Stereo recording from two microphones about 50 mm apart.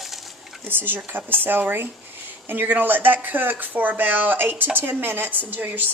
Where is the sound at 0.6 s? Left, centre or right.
Right.